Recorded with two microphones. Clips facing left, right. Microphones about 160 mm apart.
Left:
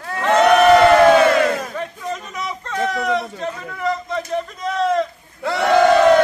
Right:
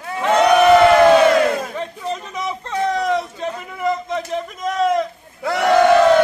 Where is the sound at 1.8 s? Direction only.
20° right (ahead or behind).